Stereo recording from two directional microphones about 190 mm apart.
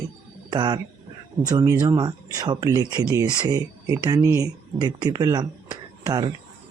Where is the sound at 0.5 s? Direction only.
20° right (ahead or behind).